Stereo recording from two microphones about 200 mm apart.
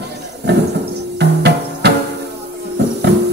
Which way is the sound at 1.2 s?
55° right (ahead or behind).